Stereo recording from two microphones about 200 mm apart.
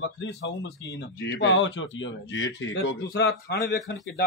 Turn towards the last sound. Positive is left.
turn(degrees=55)  # may be behind; listen again after turning